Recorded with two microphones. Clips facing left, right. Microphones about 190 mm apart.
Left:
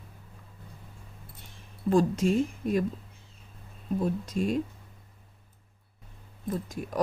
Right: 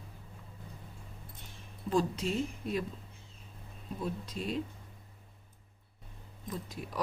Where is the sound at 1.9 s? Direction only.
50° left (ahead or behind).